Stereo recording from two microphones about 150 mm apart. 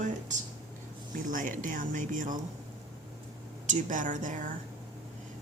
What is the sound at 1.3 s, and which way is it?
A woman's voice, 60° right (ahead or behind).